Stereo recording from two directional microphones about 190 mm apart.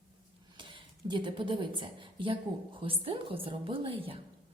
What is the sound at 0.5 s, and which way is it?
A woman's voice, 25° right (ahead or behind).